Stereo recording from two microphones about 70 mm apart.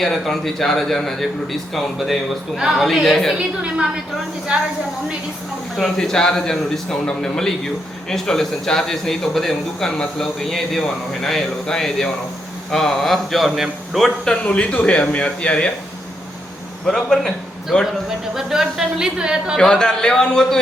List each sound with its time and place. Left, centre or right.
0.0 s a man's voice: centre
3.3 s speech: centre
5.7 s a man's voice: centre
14.4 s speech: centre
16.8 s a man's voice: centre
18.3 s speech: centre
19.5 s speech: centre